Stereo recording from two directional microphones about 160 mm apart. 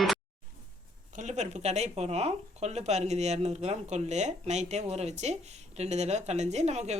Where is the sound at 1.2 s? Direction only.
45° right (ahead or behind).